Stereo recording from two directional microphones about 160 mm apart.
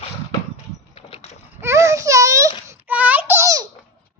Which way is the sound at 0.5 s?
40° left (ahead or behind).